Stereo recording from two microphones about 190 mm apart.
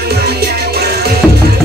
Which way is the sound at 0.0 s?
55° right (ahead or behind).